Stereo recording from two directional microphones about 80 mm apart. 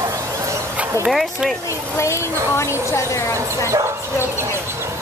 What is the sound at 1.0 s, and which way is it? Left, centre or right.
Speech, centre.